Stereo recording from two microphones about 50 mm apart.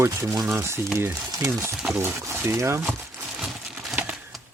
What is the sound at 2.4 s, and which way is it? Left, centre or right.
Speech, right.